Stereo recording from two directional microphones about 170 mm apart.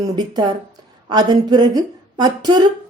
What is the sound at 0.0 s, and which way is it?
A woman's voice, 25° right (ahead or behind).